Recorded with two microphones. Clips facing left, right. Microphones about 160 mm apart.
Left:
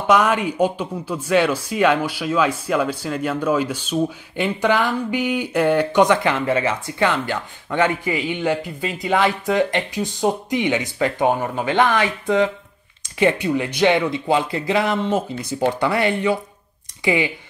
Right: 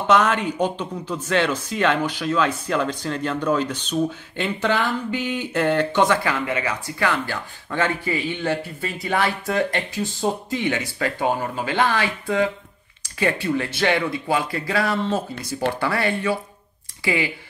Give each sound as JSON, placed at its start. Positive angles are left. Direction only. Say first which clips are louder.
{"t": 0.0, "sound": "speech", "louder": "left 2 dB", "side_deg": 10}
{"t": 6.4, "sound": "a man's voice", "louder": "left 5 dB", "side_deg": 25}